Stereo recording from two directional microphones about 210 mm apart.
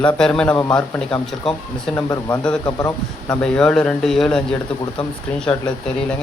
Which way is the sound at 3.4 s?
5° left (ahead or behind).